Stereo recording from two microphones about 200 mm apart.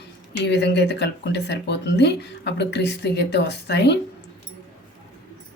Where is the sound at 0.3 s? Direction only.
60° left (ahead or behind).